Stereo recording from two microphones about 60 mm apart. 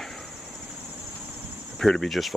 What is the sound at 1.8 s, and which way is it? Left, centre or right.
Speech, centre.